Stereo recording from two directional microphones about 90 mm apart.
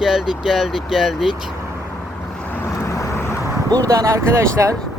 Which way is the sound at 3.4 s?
40° right (ahead or behind).